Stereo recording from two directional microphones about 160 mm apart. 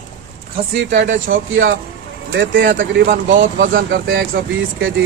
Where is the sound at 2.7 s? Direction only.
90° right.